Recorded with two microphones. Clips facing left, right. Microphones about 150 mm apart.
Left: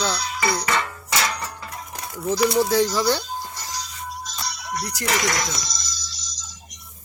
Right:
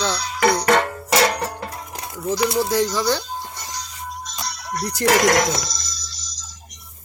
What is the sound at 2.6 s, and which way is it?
Speech, 15° right (ahead or behind).